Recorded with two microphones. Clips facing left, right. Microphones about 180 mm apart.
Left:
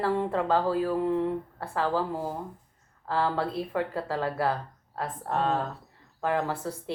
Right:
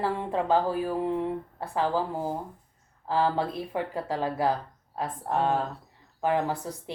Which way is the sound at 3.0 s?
15° right (ahead or behind).